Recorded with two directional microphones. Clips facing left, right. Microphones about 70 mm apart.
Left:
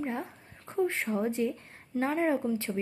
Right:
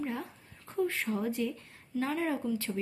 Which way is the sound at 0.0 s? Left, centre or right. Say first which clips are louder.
Left 2 dB; left.